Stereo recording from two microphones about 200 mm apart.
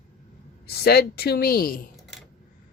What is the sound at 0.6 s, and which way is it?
Speech, 50° left (ahead or behind).